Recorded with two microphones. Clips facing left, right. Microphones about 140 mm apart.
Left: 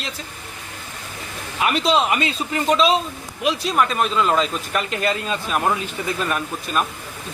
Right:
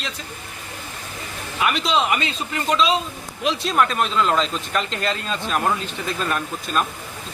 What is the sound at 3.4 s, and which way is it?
Speech, centre (ahead or behind).